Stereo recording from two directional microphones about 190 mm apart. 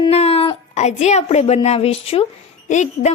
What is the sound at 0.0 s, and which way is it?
A woman's voice, 30° left (ahead or behind).